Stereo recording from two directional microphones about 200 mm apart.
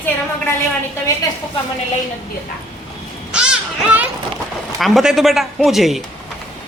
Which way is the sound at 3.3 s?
5° right (ahead or behind).